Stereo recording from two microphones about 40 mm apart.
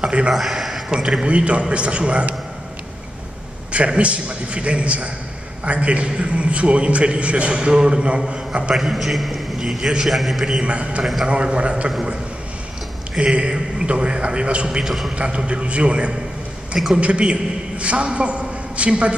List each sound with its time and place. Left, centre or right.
0.0 s a man's voice: right
0.3 s a sound: centre
0.9 s a man's voice: right
3.7 s a man's voice: right
8.7 s a man's voice: centre
10.6 s a man's voice: right
13.2 s a man's voice: right
14.9 s a man's voice: centre
15.1 s a man's voice: right